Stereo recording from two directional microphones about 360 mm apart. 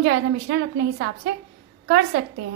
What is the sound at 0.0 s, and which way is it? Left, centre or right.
A woman's voice, right.